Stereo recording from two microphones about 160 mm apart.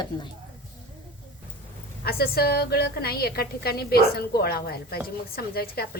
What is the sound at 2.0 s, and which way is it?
A woman's voice, 75° left (ahead or behind).